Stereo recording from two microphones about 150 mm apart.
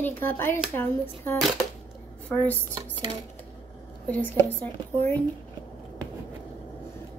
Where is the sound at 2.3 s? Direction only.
10° left (ahead or behind).